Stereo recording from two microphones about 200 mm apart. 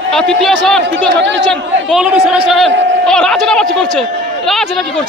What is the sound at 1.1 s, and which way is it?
Speech, 60° right (ahead or behind).